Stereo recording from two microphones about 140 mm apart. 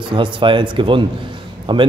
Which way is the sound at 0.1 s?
35° right (ahead or behind).